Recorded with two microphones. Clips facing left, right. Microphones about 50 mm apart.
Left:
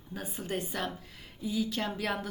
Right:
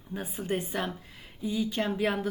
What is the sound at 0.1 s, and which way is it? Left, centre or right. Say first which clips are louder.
A woman's voice: right 4 dB; centre.